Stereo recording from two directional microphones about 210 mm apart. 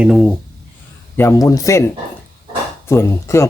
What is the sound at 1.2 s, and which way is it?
Speech, 15° left (ahead or behind).